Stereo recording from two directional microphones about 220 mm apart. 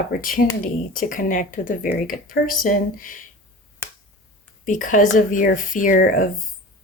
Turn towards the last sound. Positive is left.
turn(degrees=40)  # may be behind; listen again after turning